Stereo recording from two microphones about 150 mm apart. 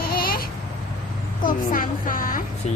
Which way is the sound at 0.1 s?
85° left.